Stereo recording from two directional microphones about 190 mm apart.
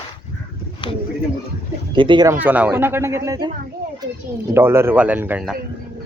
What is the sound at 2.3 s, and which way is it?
Speech, 10° right (ahead or behind).